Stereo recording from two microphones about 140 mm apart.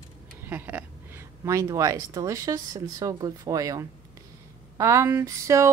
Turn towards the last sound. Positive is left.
turn(degrees=-20)  # may be behind; listen again after turning